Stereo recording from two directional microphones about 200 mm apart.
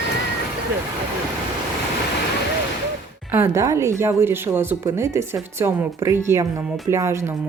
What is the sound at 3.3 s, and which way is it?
Speech, 15° right (ahead or behind).